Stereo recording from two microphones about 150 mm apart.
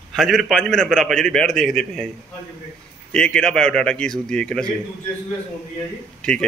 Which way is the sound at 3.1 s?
5° left (ahead or behind).